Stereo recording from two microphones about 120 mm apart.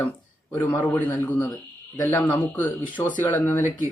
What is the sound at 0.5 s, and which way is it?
A man's voice, 15° left (ahead or behind).